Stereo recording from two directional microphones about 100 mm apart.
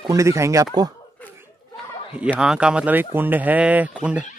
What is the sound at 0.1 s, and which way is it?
Speech, 30° right (ahead or behind).